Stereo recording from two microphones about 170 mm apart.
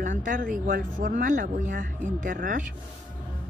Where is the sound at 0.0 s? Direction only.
50° right (ahead or behind).